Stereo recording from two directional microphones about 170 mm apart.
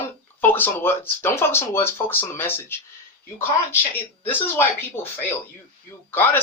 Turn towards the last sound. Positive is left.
turn(degrees=10)  # may be behind; listen again after turning